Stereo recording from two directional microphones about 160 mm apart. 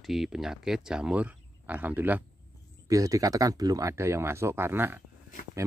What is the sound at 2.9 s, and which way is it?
Speech, 20° right (ahead or behind).